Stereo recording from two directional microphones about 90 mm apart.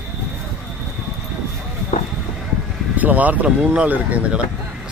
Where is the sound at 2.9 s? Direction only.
20° right (ahead or behind).